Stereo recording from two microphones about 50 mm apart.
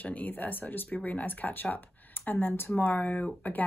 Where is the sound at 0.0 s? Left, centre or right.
Left.